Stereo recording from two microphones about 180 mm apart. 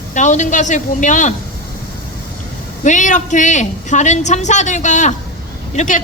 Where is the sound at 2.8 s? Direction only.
45° left (ahead or behind).